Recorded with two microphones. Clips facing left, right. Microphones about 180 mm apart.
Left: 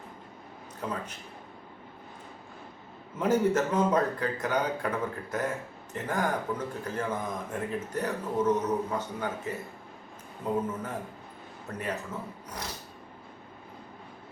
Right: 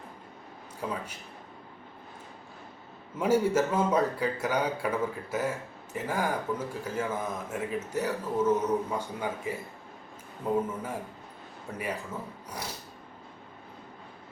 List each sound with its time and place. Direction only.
0.8 s a man's voice: 10° right (ahead or behind)
3.2 s a man's voice: 10° right (ahead or behind)
11.8 s a man's voice: 10° right (ahead or behind)